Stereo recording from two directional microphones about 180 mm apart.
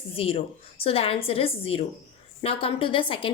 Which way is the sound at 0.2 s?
30° left (ahead or behind).